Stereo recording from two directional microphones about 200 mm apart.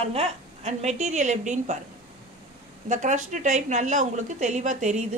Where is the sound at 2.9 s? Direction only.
40° right (ahead or behind).